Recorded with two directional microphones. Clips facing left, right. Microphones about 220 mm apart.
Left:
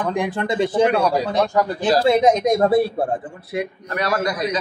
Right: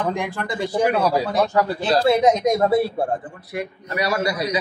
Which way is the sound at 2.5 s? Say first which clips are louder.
Left 2 dB; 30° left (ahead or behind).